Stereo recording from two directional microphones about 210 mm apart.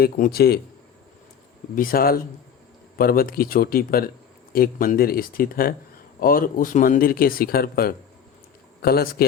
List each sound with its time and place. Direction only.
0.0 s speech: 45° left (ahead or behind)
1.7 s speech: 40° left (ahead or behind)